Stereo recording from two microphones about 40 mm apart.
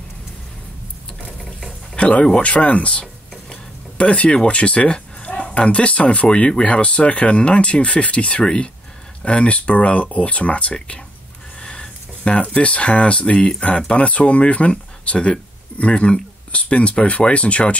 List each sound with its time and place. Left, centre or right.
2.0 s speech: left
11.6 s a sound: left
12.4 s speech: left